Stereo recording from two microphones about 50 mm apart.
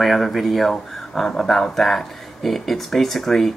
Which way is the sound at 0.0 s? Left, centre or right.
Centre.